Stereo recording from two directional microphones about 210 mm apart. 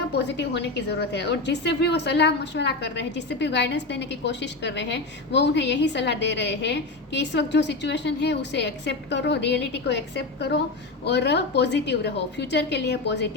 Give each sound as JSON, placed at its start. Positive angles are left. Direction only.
{"t": 0.1, "sound": "a woman's voice", "side_deg": 55}